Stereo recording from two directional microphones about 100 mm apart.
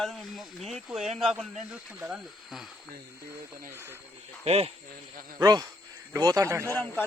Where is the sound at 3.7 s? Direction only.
25° right (ahead or behind).